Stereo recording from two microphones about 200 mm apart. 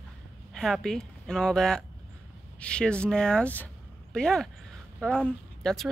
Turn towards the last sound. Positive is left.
turn(degrees=0)  # may be behind; listen again after turning